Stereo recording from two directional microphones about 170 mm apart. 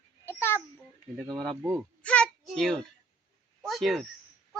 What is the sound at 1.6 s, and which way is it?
Speech, 15° right (ahead or behind).